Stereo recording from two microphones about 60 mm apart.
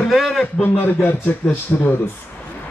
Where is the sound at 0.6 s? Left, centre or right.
Left.